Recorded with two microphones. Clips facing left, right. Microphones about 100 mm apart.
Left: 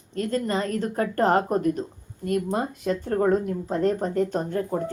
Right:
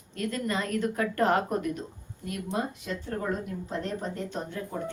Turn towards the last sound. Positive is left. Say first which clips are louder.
# left 9 dB
turn(degrees=40)  # may be behind; listen again after turning